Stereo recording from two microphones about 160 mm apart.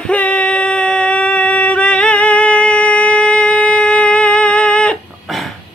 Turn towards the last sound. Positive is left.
turn(degrees=0)  # may be behind; listen again after turning